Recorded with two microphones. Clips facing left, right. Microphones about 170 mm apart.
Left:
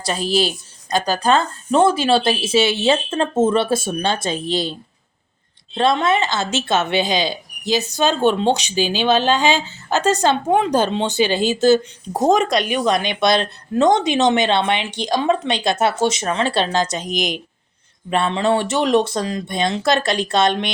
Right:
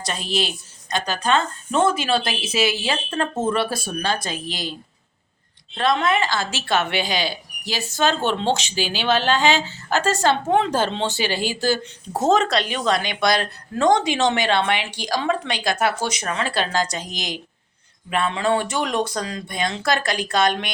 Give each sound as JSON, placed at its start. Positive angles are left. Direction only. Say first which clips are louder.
{"t": 0.0, "sound": "speech", "louder": "left 6 dB", "side_deg": 35}